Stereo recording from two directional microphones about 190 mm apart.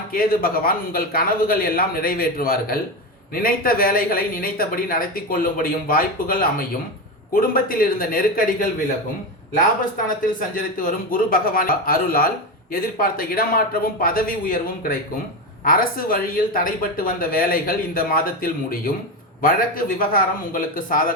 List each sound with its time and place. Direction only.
0.1 s speech: 50° left (ahead or behind)
10.5 s speech: 45° left (ahead or behind)